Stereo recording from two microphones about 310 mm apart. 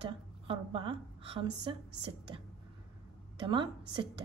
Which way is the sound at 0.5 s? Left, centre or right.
Centre.